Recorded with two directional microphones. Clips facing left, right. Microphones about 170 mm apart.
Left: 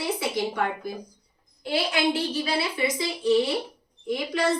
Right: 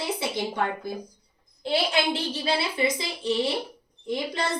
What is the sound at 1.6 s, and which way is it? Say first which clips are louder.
A woman's voice: even; 30° right (ahead or behind).